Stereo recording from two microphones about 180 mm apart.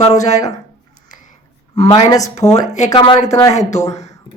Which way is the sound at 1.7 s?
25° left (ahead or behind).